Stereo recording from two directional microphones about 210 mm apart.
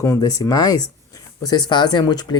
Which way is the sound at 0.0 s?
15° left (ahead or behind).